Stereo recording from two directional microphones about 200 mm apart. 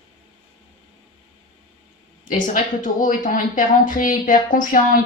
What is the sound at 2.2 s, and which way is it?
Speech, 40° left (ahead or behind).